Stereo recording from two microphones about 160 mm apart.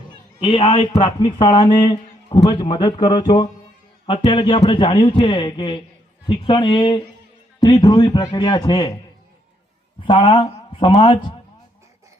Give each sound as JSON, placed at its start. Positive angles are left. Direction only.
{"t": 0.3, "sound": "a man's voice", "side_deg": 30}
{"t": 10.0, "sound": "a man's voice", "side_deg": 30}